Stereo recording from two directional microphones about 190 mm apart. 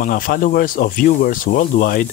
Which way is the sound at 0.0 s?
45° left (ahead or behind).